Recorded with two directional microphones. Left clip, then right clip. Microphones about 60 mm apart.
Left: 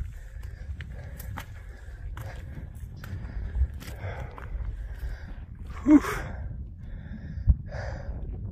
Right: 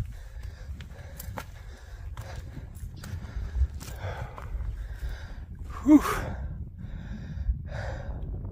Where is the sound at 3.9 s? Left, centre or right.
Right.